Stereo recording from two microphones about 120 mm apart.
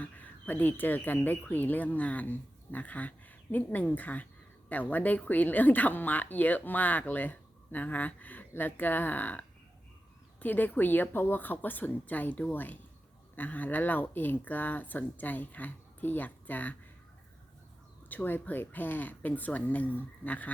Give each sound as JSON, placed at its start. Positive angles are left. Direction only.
{"t": 0.0, "sound": "speech", "side_deg": 15}
{"t": 10.4, "sound": "speech", "side_deg": 15}
{"t": 18.1, "sound": "speech", "side_deg": 15}